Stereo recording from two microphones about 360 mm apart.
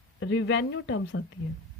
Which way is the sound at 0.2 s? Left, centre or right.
Left.